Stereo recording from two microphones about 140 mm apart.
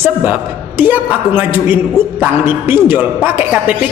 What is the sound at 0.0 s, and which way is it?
A man's voice, 15° right (ahead or behind).